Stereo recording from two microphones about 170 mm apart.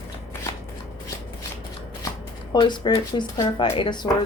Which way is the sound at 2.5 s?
25° left (ahead or behind).